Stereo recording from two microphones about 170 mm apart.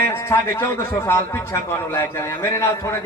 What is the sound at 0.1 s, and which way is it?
A man's voice, 15° left (ahead or behind).